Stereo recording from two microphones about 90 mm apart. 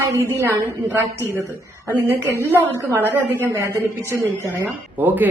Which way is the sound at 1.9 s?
20° right (ahead or behind).